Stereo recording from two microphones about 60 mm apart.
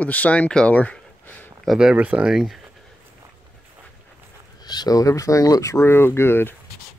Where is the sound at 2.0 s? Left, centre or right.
Right.